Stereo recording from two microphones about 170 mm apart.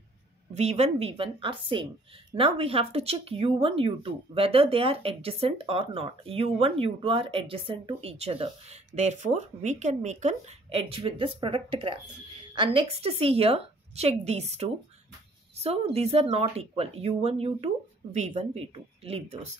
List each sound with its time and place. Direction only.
0.6 s speech: 40° right (ahead or behind)